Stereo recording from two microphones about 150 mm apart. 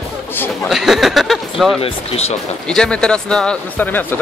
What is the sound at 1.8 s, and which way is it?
Speech, 40° left (ahead or behind).